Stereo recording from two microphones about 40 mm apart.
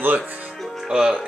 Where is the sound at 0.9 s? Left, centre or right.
Right.